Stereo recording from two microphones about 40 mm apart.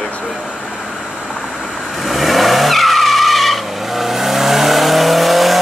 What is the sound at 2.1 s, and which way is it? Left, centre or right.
Vehicle, centre.